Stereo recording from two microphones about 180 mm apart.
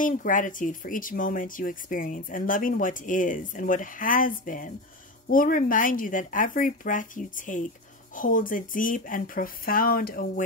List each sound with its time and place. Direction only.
0.0 s speech: 45° left (ahead or behind)